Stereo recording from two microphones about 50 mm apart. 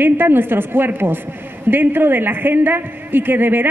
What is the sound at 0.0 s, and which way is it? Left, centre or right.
A woman's voice, right.